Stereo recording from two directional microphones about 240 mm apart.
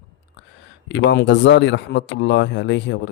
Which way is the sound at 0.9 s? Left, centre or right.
Left.